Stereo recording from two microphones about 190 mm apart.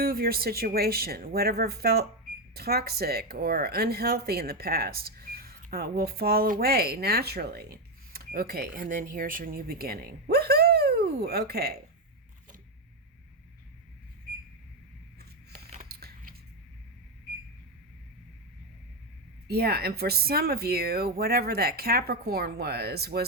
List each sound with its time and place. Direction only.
0.0 s speech: 50° right (ahead or behind)
15.7 s scissors: 50° right (ahead or behind)
19.5 s speech: 55° right (ahead or behind)